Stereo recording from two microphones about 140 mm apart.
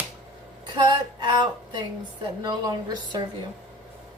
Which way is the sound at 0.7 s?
30° right (ahead or behind).